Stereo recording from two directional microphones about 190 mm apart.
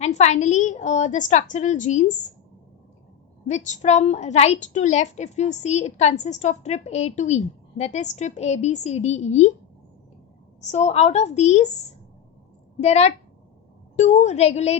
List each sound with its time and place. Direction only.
0.0 s a woman's voice: 35° left (ahead or behind)
3.4 s a woman's voice: 40° left (ahead or behind)
10.6 s a woman's voice: 35° left (ahead or behind)
12.8 s a woman's voice: 35° left (ahead or behind)